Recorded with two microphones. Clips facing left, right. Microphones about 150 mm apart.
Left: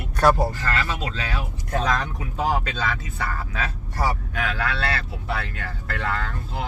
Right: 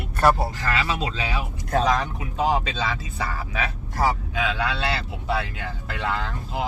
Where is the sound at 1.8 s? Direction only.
5° right (ahead or behind).